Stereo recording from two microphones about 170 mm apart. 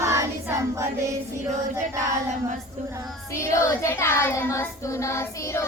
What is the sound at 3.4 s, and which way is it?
Child singing, 15° left (ahead or behind).